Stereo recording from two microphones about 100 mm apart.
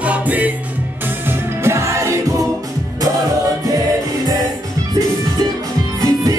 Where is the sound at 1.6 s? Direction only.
30° right (ahead or behind).